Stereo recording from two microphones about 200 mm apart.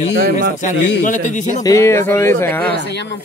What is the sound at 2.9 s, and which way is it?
Speech, 60° left (ahead or behind).